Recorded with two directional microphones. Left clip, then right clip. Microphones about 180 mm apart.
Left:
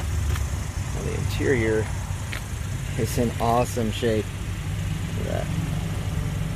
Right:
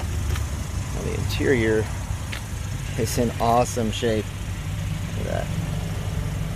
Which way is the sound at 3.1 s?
Centre (ahead or behind).